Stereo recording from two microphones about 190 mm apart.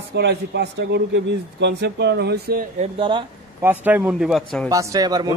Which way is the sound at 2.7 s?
30° right (ahead or behind).